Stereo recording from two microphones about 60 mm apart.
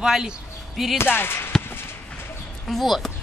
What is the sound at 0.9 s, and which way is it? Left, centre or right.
Speech, left.